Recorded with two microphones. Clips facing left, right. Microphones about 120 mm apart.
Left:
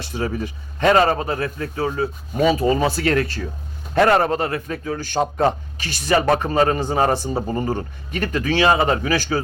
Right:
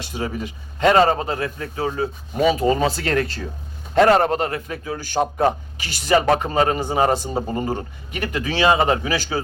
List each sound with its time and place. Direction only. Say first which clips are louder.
0.0 s a man's voice: left 2 dB; 20° right (ahead or behind)
2.4 s a man's voice: even; 20° right (ahead or behind)